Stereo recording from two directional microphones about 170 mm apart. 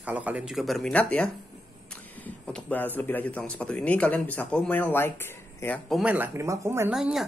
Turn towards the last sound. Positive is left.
turn(degrees=-5)  # may be behind; listen again after turning